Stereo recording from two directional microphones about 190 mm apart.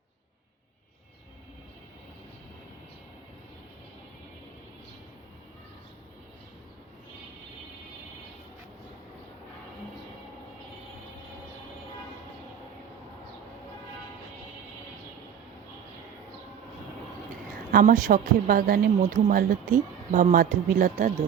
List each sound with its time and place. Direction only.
17.5 s a woman's voice: 50° right (ahead or behind)